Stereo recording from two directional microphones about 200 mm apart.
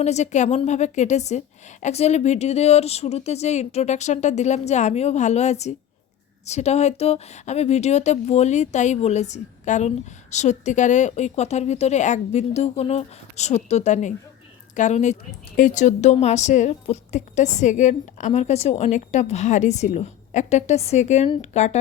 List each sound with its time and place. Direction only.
0.0 s a woman's voice: 35° left (ahead or behind)